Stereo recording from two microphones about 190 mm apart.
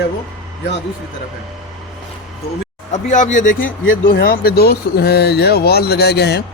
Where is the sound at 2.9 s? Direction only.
40° left (ahead or behind).